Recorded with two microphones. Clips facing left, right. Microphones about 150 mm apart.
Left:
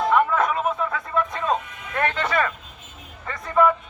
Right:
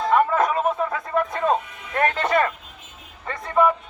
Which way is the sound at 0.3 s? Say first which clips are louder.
Right 2 dB; 30° right (ahead or behind).